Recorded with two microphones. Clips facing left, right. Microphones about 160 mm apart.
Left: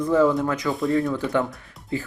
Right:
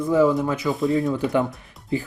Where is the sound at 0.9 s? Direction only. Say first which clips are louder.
Even; 20° right (ahead or behind).